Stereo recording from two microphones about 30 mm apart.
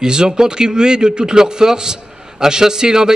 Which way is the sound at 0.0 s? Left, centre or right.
Right.